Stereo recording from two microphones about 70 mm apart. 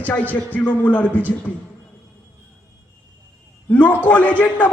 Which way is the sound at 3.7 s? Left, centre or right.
Left.